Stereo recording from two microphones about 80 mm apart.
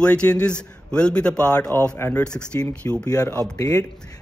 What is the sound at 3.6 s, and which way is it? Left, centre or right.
Speech, left.